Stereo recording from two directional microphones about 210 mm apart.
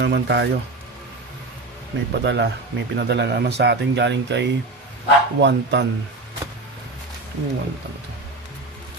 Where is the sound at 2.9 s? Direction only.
55° right (ahead or behind).